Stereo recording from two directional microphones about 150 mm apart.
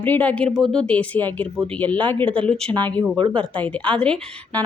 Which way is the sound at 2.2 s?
35° right (ahead or behind).